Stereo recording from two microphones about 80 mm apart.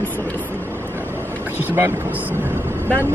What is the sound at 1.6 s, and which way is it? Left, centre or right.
Speech, right.